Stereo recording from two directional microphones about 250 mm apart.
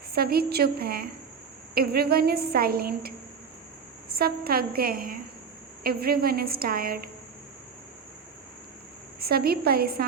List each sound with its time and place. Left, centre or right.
0.1 s a woman's voice: right
4.1 s a woman's voice: right
9.2 s a woman's voice: right